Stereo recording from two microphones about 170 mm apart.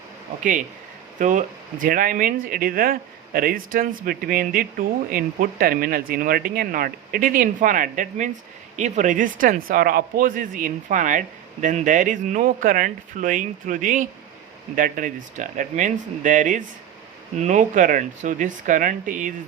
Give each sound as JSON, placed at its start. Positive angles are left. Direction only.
{"t": 1.2, "sound": "speech", "side_deg": -50}